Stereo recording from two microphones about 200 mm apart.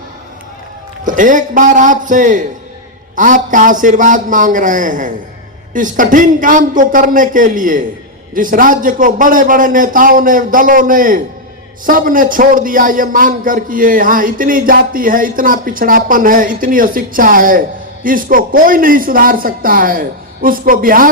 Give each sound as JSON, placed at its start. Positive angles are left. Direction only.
{"t": 1.0, "sound": "a man's voice", "side_deg": -40}